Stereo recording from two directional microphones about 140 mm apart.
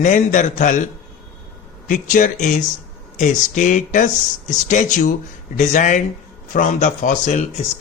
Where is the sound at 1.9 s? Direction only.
70° left (ahead or behind).